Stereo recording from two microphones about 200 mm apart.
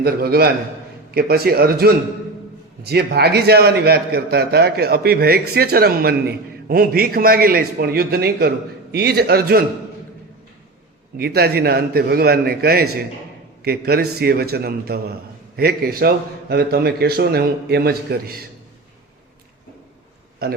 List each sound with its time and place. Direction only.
0.0 s a man's voice: 50° right (ahead or behind)
11.2 s a man's voice: 50° right (ahead or behind)